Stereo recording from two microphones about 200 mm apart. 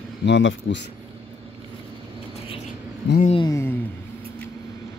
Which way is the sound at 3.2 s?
30° left (ahead or behind).